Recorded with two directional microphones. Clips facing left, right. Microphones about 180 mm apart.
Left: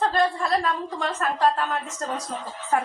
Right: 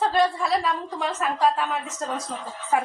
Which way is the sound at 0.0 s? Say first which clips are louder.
Right 1 dB; 5° right (ahead or behind).